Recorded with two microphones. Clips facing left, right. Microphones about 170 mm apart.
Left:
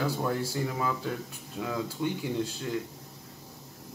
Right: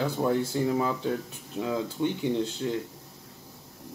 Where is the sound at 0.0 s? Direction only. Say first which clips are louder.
Right 4 dB; 25° right (ahead or behind).